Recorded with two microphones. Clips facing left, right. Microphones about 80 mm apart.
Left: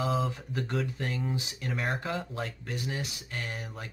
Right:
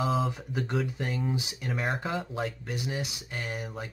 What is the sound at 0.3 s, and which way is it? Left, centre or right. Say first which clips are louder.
Speech: right 2 dB; centre.